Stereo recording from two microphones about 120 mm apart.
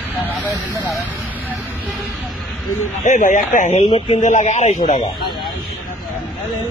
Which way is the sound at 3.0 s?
90° left.